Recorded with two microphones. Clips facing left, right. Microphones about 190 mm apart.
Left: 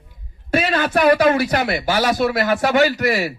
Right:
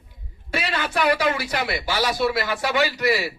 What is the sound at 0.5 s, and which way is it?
A man's voice, 50° left (ahead or behind).